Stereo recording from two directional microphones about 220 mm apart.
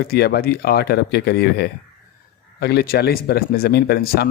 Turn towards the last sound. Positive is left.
turn(degrees=45)  # may be behind; listen again after turning